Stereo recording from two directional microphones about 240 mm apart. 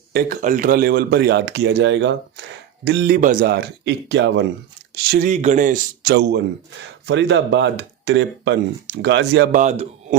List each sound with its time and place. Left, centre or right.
0.1 s speech: right
5.1 s speech: right
9.6 s speech: right